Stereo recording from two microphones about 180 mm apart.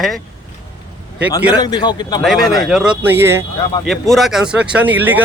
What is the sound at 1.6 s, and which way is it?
Speech, 20° left (ahead or behind).